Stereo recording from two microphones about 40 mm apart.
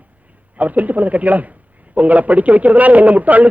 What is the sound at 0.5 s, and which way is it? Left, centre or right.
A woman's voice, right.